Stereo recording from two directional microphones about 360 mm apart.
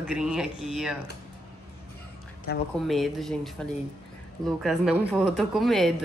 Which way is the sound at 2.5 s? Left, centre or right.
Left.